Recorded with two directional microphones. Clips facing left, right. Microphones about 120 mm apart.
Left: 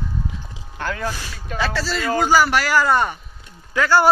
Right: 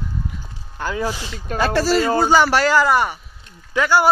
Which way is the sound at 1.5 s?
45° right (ahead or behind).